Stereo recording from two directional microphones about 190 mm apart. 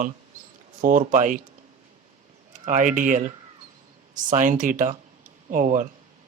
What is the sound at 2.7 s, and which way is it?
Speech, 40° right (ahead or behind).